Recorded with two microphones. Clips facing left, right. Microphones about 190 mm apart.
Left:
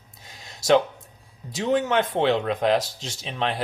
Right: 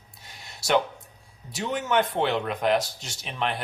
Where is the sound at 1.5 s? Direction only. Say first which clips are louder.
Left 5 dB; 90° left.